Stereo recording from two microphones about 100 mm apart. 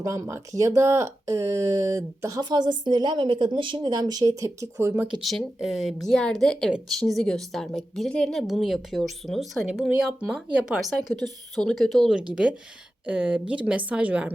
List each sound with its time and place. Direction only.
0.0 s speech: 30° right (ahead or behind)
2.4 s a woman's voice: 45° right (ahead or behind)
3.9 s speech: 40° right (ahead or behind)
5.2 s a woman's voice: centre (ahead or behind)
12.1 s a woman's voice: 10° right (ahead or behind)